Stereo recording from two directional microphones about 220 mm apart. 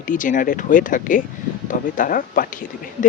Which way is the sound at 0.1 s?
35° left (ahead or behind).